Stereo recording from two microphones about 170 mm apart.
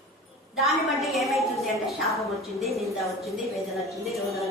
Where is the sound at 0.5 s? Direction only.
Centre (ahead or behind).